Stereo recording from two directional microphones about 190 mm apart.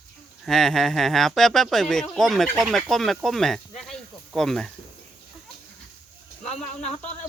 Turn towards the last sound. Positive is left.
turn(degrees=5)  # may be behind; listen again after turning